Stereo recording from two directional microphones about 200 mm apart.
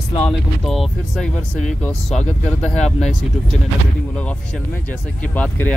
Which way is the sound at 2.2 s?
35° left (ahead or behind).